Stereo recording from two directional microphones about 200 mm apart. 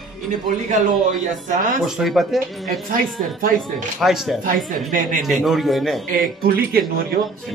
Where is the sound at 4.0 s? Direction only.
Centre (ahead or behind).